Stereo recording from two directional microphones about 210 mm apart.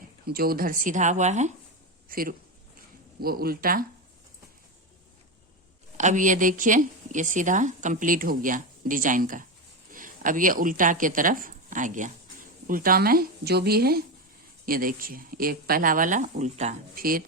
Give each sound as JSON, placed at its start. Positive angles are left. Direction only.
{"t": 0.3, "sound": "a man's voice", "side_deg": -45}
{"t": 6.0, "sound": "speech", "side_deg": -35}